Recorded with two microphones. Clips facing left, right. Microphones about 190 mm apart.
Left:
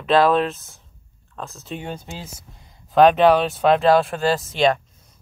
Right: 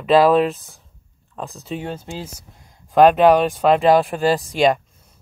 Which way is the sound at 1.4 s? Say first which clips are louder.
Right 4 dB; 15° right (ahead or behind).